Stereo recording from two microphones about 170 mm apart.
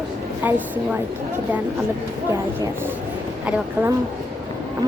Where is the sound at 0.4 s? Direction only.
10° right (ahead or behind).